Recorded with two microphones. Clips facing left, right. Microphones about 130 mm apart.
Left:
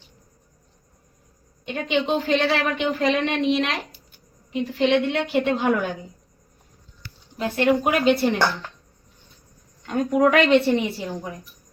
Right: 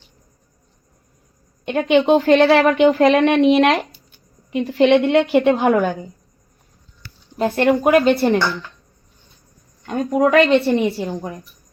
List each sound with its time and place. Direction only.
1.6 s a woman's voice: 55° right (ahead or behind)
7.3 s a woman's voice: 45° right (ahead or behind)
10.1 s a woman's voice: 30° right (ahead or behind)
10.7 s a woman's voice: 40° right (ahead or behind)